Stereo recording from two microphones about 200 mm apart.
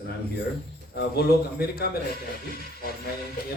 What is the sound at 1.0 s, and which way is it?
Speech, 50° left (ahead or behind).